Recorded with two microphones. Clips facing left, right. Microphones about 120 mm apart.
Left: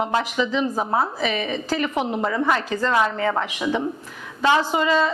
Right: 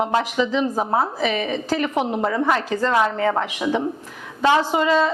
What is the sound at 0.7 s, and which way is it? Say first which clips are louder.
A woman's voice: right 1 dB; 40° right (ahead or behind).